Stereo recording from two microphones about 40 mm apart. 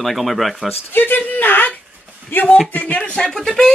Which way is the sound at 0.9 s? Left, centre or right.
Left.